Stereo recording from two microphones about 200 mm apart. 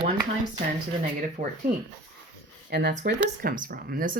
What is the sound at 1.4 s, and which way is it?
Speech, 40° right (ahead or behind).